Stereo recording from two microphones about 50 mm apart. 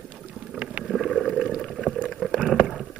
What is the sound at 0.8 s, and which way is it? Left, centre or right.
Boat, centre.